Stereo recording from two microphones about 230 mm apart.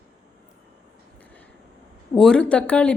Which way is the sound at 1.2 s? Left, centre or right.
Centre.